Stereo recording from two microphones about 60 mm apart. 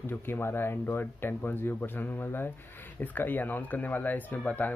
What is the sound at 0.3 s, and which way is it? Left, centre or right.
Speech, left.